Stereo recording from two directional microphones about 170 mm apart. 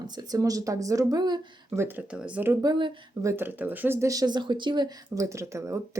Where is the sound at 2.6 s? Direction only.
25° right (ahead or behind).